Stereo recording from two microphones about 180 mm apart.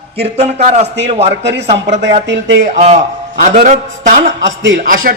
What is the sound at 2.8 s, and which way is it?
A man's voice, 40° right (ahead or behind).